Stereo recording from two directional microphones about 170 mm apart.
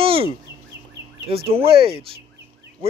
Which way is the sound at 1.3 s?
35° right (ahead or behind).